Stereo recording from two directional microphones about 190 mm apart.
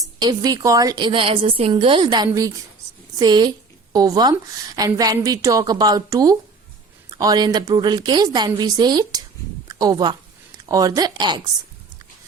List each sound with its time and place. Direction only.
0.2 s a woman's voice: 20° right (ahead or behind)